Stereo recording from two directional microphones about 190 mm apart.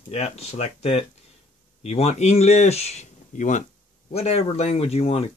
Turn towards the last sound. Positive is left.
turn(degrees=30)  # may be behind; listen again after turning